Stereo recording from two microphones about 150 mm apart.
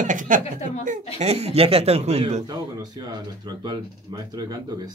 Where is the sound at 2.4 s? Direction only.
25° right (ahead or behind).